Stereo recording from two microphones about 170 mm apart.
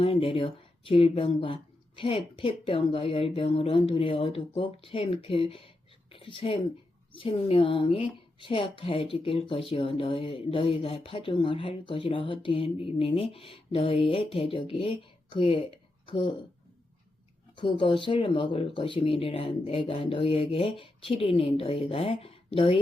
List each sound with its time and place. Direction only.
0.0 s speech: 35° left (ahead or behind)
17.6 s speech: 30° left (ahead or behind)